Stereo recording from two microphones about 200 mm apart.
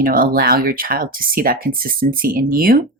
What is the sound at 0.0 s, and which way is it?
Speech, 45° right (ahead or behind).